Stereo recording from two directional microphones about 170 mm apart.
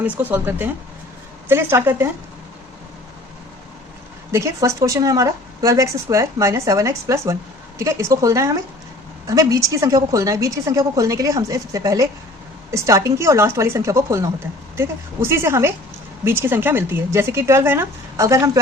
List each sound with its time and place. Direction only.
0.0 s a woman's voice: 10° right (ahead or behind)
4.3 s a woman's voice: 15° right (ahead or behind)